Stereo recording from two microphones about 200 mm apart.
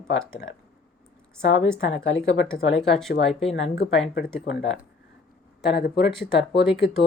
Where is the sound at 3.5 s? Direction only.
65° left (ahead or behind).